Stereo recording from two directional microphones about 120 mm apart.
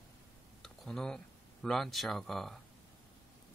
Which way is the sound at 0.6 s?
5° left (ahead or behind).